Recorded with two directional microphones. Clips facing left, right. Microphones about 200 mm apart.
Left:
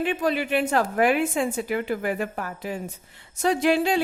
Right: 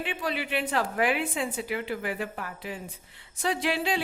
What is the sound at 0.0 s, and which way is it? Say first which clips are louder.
A woman's voice: left 7 dB; 45° left (ahead or behind).